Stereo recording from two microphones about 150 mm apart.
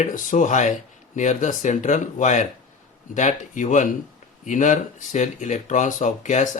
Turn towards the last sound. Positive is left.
turn(degrees=55)  # may be behind; listen again after turning